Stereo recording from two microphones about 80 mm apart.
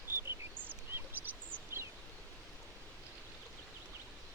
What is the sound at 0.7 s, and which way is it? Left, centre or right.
Bird, right.